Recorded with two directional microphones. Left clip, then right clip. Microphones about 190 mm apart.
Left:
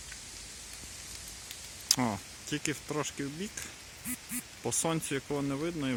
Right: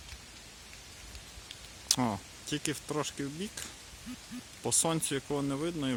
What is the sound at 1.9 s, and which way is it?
Speech, 5° right (ahead or behind).